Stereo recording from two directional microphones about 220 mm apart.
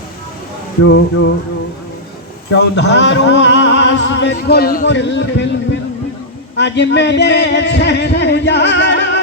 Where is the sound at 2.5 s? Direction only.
50° left (ahead or behind).